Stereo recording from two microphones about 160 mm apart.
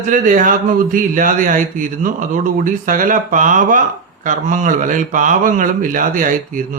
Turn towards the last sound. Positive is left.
turn(degrees=-55)  # may be behind; listen again after turning